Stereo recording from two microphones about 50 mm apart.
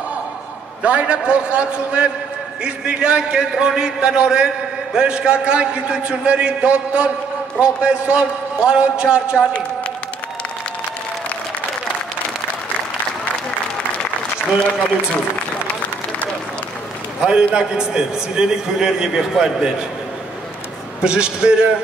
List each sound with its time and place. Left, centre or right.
0.8 s a man's voice: right
17.2 s a man's voice: centre
21.0 s a man's voice: centre